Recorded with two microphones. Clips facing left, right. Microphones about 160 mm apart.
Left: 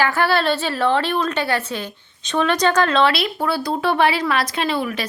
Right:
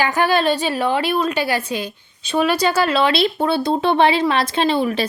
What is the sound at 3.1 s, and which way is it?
A woman's voice, 25° right (ahead or behind).